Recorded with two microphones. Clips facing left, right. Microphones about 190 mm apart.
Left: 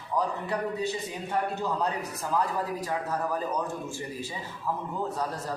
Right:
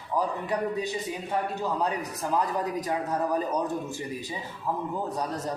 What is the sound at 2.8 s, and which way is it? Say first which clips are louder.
Speech: right 2 dB; 20° right (ahead or behind).